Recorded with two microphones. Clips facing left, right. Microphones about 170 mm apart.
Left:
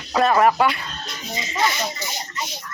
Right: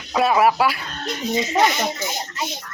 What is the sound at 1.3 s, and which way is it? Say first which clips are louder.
Speech: right 4 dB; 60° right (ahead or behind).